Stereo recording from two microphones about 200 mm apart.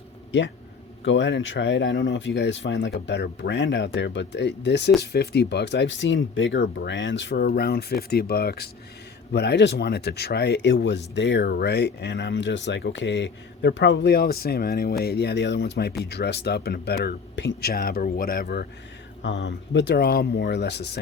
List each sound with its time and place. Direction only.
0.3 s speech: 60° left (ahead or behind)
19.2 s speech: 60° left (ahead or behind)